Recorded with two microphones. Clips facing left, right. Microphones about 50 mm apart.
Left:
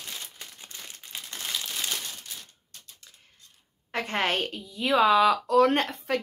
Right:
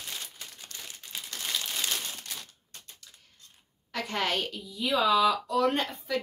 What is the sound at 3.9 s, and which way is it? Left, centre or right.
A woman's voice, left.